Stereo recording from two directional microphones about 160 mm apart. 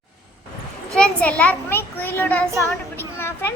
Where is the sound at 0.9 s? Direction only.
5° left (ahead or behind).